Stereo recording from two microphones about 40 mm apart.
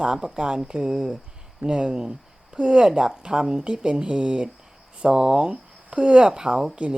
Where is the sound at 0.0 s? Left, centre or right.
Right.